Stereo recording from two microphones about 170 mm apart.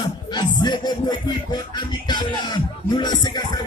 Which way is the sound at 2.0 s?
25° left (ahead or behind).